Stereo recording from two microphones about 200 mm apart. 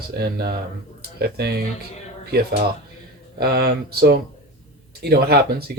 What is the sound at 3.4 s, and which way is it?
Speech, 50° right (ahead or behind).